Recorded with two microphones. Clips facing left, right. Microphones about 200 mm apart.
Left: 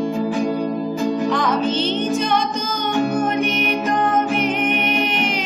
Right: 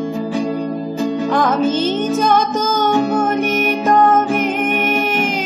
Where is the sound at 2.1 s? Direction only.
45° right (ahead or behind).